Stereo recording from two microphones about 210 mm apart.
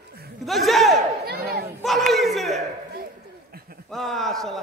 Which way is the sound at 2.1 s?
Centre (ahead or behind).